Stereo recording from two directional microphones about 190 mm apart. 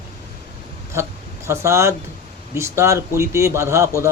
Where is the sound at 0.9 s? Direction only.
15° right (ahead or behind).